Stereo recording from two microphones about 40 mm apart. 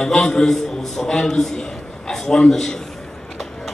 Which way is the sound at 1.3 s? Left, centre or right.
Centre.